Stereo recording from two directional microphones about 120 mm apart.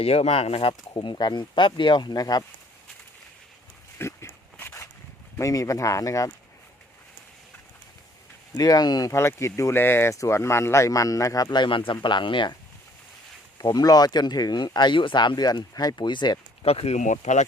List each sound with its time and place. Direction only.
0.0 s speech: 55° left (ahead or behind)
0.7 s speech: 40° left (ahead or behind)
3.9 s dog: 20° left (ahead or behind)
5.4 s speech: 25° left (ahead or behind)
8.5 s speech: 30° left (ahead or behind)
13.6 s speech: 35° left (ahead or behind)
16.6 s speech: 60° left (ahead or behind); by 17.4 s 85° left